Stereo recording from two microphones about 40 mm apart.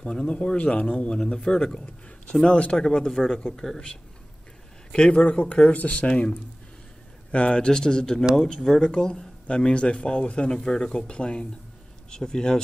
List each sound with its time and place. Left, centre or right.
0.3 s speech: left
1.1 s speech: centre
2.4 s speech: left
2.8 s speech: centre
3.1 s speech: centre
4.9 s speech: left
7.2 s speech: left
10.5 s speech: centre